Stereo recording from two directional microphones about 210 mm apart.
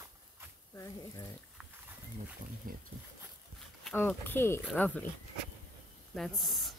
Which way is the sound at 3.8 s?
10° left (ahead or behind).